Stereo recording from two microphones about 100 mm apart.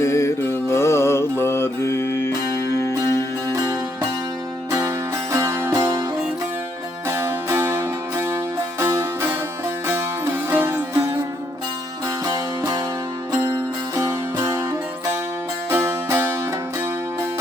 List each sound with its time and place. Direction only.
0.0 s mantra: 30° left (ahead or behind)
3.5 s music: 35° right (ahead or behind)
7.1 s music: 25° right (ahead or behind)
10.8 s music: 20° right (ahead or behind)
12.2 s music: 40° right (ahead or behind)
13.9 s music: 25° right (ahead or behind)